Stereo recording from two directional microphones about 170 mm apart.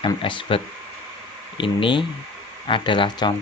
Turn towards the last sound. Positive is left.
turn(degrees=30)  # may be behind; listen again after turning